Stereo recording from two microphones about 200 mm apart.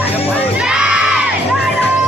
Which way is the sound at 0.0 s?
30° left (ahead or behind).